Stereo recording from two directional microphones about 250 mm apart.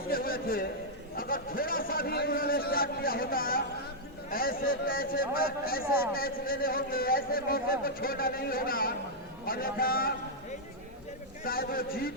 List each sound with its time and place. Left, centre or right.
0.1 s a sound: left
1.1 s speech: left
11.4 s speech: left